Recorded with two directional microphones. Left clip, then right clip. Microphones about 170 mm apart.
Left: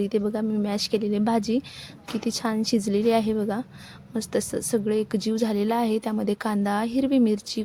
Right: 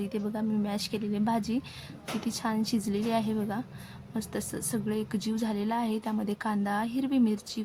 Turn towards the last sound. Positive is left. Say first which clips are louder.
# left 6 dB
turn(degrees=35)  # may be behind; listen again after turning